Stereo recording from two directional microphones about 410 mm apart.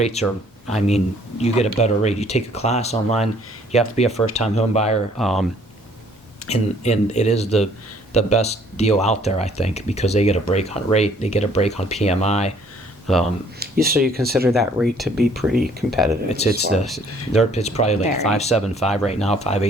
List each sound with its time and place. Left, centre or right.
0.0 s speech: centre
5.1 s speech: centre
6.5 s speech: centre
13.6 s speech: right
14.4 s speech: centre
16.4 s speech: centre
16.8 s speech: centre
17.5 s speech: centre